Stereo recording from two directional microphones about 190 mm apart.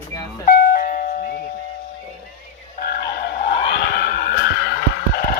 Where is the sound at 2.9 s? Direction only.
55° left (ahead or behind).